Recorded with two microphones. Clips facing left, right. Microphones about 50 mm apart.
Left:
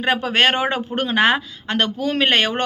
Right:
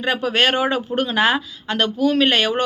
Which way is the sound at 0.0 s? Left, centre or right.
Left.